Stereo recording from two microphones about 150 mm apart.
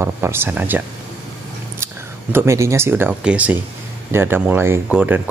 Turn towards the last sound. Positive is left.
turn(degrees=-10)  # may be behind; listen again after turning